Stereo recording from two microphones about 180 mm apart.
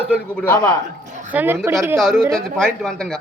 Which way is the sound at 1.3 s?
10° right (ahead or behind).